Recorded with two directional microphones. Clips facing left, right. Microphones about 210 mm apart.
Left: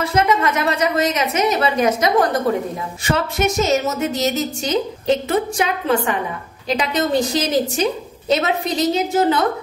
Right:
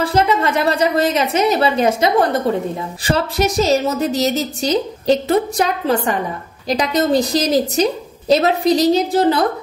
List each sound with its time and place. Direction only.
0.0 s a woman's voice: 30° right (ahead or behind)